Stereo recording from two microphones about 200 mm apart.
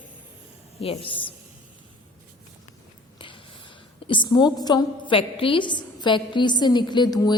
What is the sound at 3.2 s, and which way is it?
A woman's voice, 25° left (ahead or behind).